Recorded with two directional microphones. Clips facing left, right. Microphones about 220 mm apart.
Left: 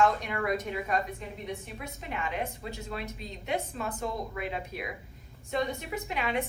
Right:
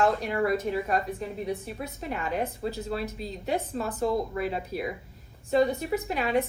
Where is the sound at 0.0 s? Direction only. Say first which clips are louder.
Right 3 dB; 35° right (ahead or behind).